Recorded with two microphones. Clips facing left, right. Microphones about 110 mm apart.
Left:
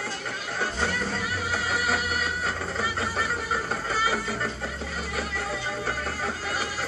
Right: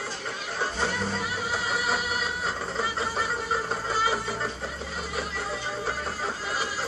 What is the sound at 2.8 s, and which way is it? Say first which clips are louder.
Fowl: right 1 dB; 25° right (ahead or behind).